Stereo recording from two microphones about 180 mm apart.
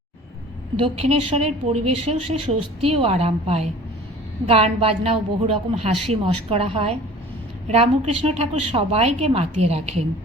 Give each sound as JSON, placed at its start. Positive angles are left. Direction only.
{"t": 0.8, "sound": "a woman's voice", "side_deg": -35}